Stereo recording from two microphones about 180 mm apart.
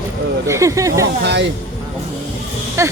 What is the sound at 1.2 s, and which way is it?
Speech, 70° right (ahead or behind).